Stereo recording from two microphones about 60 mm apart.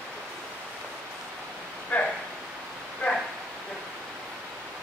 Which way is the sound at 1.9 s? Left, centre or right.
Left.